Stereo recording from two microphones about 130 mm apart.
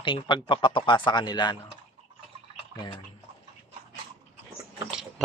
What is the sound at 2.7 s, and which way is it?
Speech, 35° left (ahead or behind).